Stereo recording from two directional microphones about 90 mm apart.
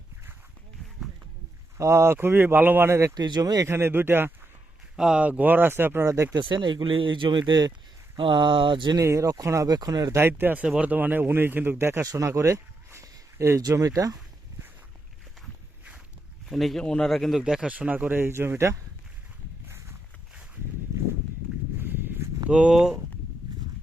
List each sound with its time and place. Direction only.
1.8 s speech: 30° right (ahead or behind)
3.2 s speech: 50° right (ahead or behind)
3.7 s speech: 25° right (ahead or behind)
4.9 s speech: 10° right (ahead or behind); by 6.3 s 30° right (ahead or behind)
6.3 s speech: 65° right (ahead or behind)
9.0 s speech: 35° right (ahead or behind)
10.2 s speech: 25° right (ahead or behind)
12.1 s a sound: 35° right (ahead or behind)
13.7 s speech: 40° right (ahead or behind)
16.5 s speech: centre (ahead or behind)
17.4 s speech: 10° right (ahead or behind); by 18.8 s 30° right (ahead or behind)
19.6 s walk: 30° right (ahead or behind)
21.8 s walk: 25° right (ahead or behind)
22.4 s speech: 10° right (ahead or behind)